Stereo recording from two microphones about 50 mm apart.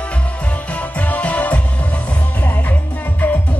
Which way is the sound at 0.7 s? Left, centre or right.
Left.